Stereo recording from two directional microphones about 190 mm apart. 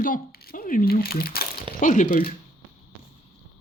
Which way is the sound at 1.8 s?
40° left (ahead or behind).